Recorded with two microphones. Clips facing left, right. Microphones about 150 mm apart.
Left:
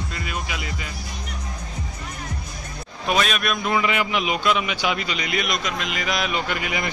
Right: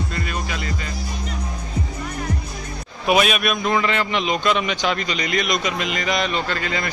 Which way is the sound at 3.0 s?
10° right (ahead or behind).